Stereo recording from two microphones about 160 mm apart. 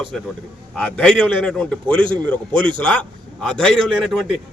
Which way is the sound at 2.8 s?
5° left (ahead or behind).